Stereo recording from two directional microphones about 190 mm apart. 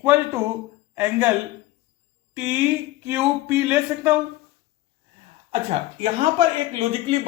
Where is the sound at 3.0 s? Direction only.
10° right (ahead or behind).